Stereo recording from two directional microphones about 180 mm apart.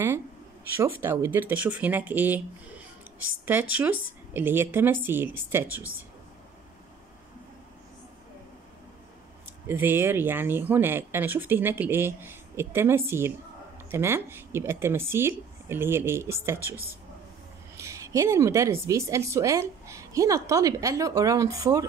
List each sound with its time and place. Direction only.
0.7 s a woman's voice: 10° right (ahead or behind)
3.7 s a woman's voice: 10° right (ahead or behind)
9.7 s a woman's voice: 10° right (ahead or behind)
17.7 s a woman's voice: 15° right (ahead or behind)